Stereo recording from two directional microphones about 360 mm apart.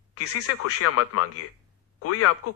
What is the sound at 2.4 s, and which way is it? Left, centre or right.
Speech, left.